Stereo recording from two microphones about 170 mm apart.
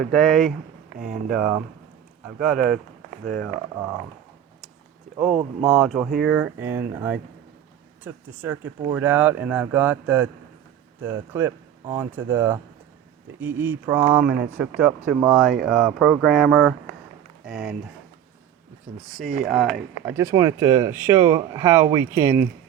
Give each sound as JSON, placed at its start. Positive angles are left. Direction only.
{"t": 0.0, "sound": "speech", "side_deg": 0}
{"t": 5.6, "sound": "speech", "side_deg": 0}
{"t": 17.4, "sound": "speech", "side_deg": -5}
{"t": 18.9, "sound": "speech", "side_deg": 20}
{"t": 19.5, "sound": "speech", "side_deg": 0}
{"t": 20.1, "sound": "speech", "side_deg": -20}